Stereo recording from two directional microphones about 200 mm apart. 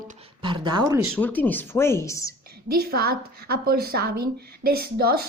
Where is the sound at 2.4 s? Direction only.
50° right (ahead or behind).